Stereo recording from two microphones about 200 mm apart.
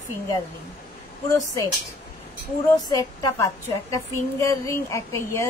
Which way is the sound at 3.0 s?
20° left (ahead or behind).